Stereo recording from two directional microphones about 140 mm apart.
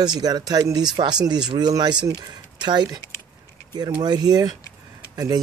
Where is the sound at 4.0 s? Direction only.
30° right (ahead or behind).